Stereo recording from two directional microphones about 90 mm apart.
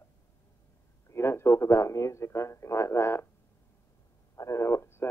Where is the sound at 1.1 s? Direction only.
30° left (ahead or behind).